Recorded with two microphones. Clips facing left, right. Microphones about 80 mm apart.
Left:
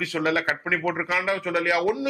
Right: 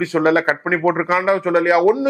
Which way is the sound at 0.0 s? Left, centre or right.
Right.